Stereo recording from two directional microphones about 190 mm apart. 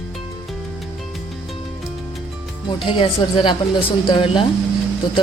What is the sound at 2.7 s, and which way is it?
Speech, 25° left (ahead or behind).